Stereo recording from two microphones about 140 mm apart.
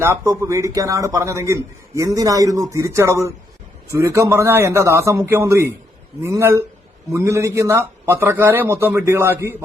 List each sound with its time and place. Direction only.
0.0 s a man's voice: 20° right (ahead or behind)